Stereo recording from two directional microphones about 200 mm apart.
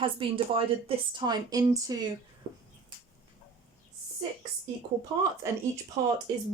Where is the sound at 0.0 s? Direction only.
25° right (ahead or behind).